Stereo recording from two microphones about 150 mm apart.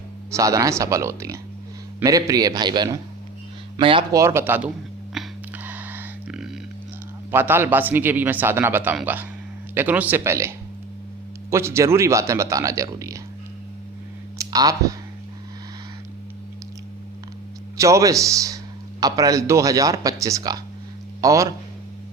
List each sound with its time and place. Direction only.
0.3 s speech: 20° right (ahead or behind); by 4.0 s 35° right (ahead or behind)
4.1 s a man's voice: 20° right (ahead or behind)
5.2 s a sound: centre (ahead or behind)
7.3 s a man's voice: 15° right (ahead or behind)
11.5 s speech: 20° right (ahead or behind)
14.3 s speech: 25° right (ahead or behind)
17.7 s a man's voice: 20° right (ahead or behind)